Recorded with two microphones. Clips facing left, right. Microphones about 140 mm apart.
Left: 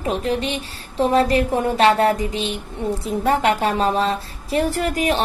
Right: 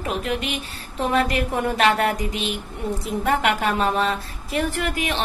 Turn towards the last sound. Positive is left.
turn(degrees=40)  # may be behind; listen again after turning